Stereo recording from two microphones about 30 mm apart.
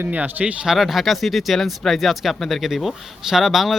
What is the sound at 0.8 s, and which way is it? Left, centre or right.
Speech, centre.